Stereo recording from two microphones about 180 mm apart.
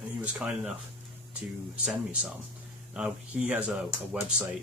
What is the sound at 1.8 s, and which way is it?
Speech, 5° right (ahead or behind).